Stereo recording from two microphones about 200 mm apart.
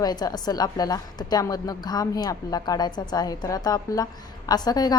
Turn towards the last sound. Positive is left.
turn(degrees=20)  # may be behind; listen again after turning